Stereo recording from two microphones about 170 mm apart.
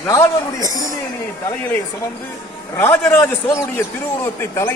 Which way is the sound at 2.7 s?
15° left (ahead or behind).